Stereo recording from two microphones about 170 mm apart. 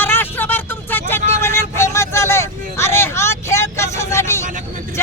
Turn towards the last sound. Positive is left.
turn(degrees=15)  # may be behind; listen again after turning